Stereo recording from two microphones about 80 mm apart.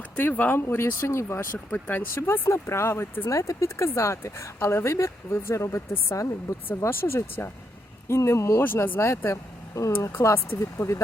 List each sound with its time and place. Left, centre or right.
0.2 s speech: left
1.5 s speech: left